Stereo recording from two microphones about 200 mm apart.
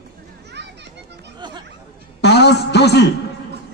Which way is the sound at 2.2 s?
55° left (ahead or behind).